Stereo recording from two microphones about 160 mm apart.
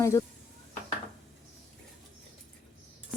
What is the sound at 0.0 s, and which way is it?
Speech, 20° left (ahead or behind).